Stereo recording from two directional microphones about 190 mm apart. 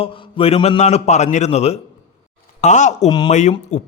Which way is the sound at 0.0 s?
30° left (ahead or behind).